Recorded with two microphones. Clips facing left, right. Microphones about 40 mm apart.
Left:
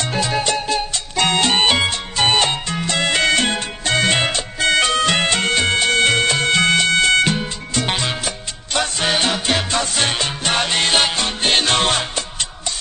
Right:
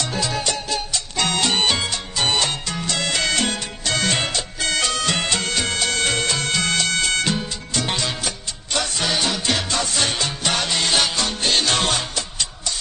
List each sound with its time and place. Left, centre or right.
0.0 s music: left